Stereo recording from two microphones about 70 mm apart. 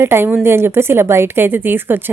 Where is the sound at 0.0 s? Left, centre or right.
Right.